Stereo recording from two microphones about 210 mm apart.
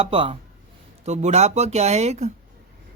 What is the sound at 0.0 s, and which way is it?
Speech, 25° right (ahead or behind).